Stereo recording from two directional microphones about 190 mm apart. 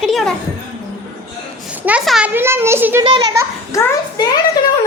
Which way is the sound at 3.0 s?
25° right (ahead or behind).